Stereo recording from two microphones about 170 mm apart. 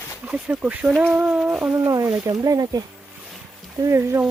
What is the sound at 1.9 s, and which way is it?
Speech, 20° right (ahead or behind).